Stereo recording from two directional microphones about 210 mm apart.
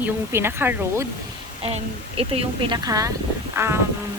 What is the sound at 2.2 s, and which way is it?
Speech, 25° right (ahead or behind).